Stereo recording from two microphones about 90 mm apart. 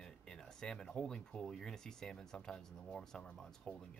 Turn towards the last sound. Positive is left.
turn(degrees=5)  # may be behind; listen again after turning